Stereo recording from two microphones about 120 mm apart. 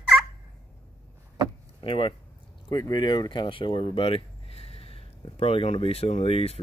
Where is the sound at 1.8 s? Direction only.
45° left (ahead or behind).